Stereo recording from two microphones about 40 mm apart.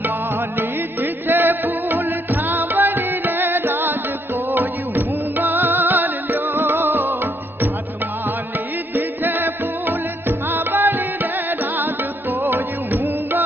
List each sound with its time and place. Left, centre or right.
1.2 s music: right
8.9 s music: right